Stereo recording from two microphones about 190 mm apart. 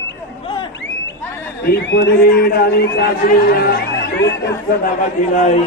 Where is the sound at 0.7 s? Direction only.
70° left (ahead or behind).